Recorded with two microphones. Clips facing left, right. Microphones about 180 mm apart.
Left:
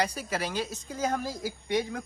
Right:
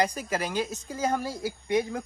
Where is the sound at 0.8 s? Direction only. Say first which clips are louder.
Right 2 dB; 5° right (ahead or behind).